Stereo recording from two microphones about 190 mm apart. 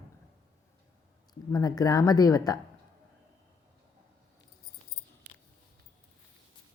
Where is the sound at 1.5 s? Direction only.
20° left (ahead or behind).